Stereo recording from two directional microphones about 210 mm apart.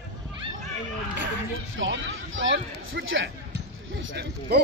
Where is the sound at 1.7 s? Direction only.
60° right (ahead or behind).